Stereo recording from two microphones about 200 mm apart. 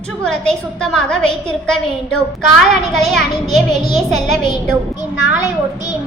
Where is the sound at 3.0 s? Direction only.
Centre (ahead or behind).